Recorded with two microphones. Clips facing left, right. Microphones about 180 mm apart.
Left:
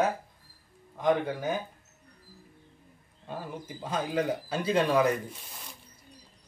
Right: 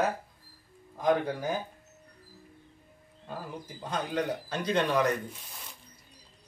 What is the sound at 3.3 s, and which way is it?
Speech, centre (ahead or behind).